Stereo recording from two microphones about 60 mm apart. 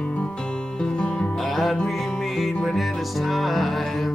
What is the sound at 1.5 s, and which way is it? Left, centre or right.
Music, centre.